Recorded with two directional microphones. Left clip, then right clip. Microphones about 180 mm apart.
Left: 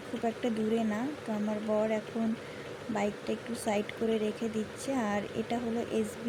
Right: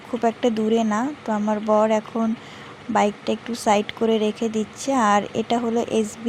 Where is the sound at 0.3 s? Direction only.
30° right (ahead or behind).